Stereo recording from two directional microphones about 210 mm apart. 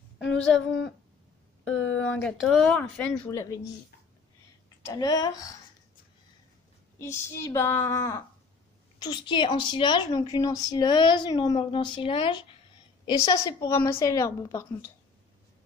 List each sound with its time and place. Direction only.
0.5 s speech: 65° left (ahead or behind)
2.1 s speech: 5° left (ahead or behind)
3.3 s a woman's voice: 15° left (ahead or behind)
4.8 s a woman's voice: 20° left (ahead or behind)
7.0 s a woman's voice: 10° left (ahead or behind)